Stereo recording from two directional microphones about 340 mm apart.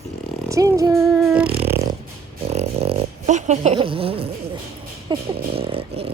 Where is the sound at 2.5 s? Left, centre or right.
Centre.